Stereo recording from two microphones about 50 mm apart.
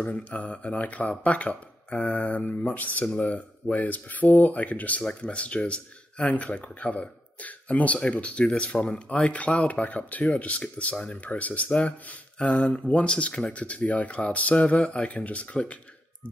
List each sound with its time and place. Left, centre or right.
0.0 s speech: left